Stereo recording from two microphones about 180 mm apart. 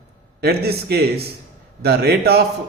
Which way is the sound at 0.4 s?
60° right (ahead or behind).